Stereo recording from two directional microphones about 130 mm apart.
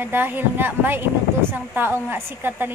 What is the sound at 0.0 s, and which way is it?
A woman's voice, 15° right (ahead or behind).